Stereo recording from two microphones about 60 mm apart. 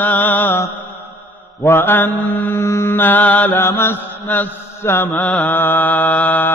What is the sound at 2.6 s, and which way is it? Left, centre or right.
Music, left.